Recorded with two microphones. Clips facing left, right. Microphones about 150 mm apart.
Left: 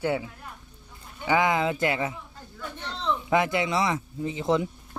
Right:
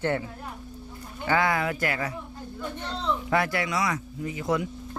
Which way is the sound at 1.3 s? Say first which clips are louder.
Left 2 dB; 20° left (ahead or behind).